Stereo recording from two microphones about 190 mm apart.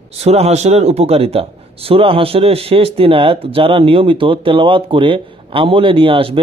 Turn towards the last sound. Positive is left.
turn(degrees=-30)  # may be behind; listen again after turning